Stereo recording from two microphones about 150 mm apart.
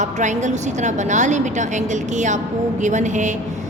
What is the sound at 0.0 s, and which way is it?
A woman's voice, 55° right (ahead or behind).